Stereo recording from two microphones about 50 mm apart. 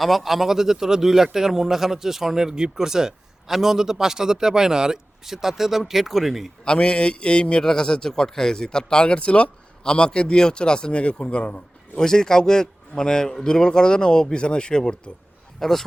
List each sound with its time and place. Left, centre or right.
0.0 s speech: centre
6.7 s a man's voice: left
11.9 s a man's voice: centre
15.6 s a man's voice: centre